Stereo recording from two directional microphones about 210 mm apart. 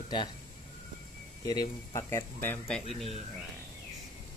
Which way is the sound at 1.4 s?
15° left (ahead or behind).